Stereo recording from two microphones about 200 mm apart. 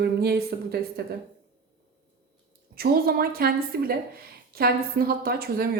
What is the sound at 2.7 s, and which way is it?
A woman's voice, 50° right (ahead or behind).